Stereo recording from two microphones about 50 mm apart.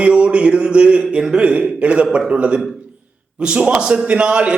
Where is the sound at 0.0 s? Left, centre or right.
Right.